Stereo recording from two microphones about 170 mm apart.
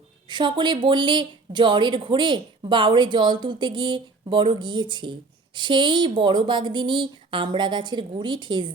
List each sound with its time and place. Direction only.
0.3 s speech: 25° right (ahead or behind)